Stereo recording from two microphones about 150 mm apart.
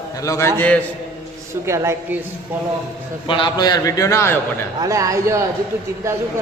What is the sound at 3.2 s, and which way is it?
A man's voice, 30° left (ahead or behind).